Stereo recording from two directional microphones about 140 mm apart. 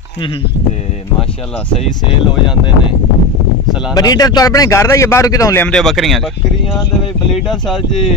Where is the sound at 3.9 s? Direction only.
30° left (ahead or behind).